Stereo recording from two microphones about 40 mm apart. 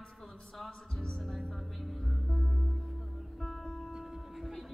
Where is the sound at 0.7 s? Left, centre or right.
Centre.